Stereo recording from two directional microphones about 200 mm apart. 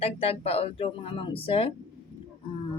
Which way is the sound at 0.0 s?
30° left (ahead or behind).